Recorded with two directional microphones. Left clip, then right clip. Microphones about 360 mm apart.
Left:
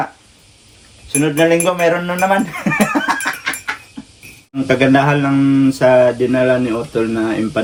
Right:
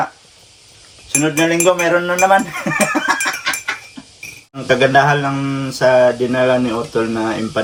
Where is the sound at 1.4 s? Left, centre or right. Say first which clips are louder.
Left 1 dB; centre.